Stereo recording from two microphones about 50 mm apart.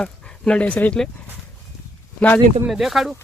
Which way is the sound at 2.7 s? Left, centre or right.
Centre.